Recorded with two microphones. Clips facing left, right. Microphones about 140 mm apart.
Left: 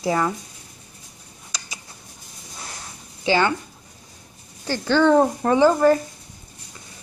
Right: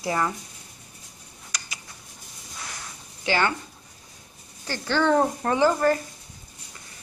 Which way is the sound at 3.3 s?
20° left (ahead or behind).